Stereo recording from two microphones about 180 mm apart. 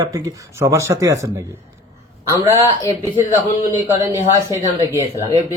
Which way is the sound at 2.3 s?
15° right (ahead or behind).